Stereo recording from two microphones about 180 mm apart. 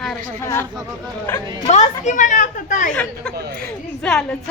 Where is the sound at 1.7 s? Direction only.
40° left (ahead or behind).